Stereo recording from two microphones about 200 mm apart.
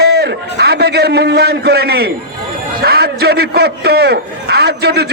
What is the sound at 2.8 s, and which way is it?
A man's voice, 50° right (ahead or behind).